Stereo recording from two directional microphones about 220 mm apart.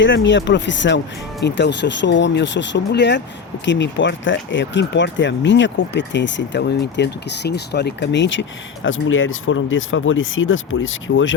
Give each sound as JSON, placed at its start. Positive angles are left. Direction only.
{"t": 0.0, "sound": "speech", "side_deg": 55}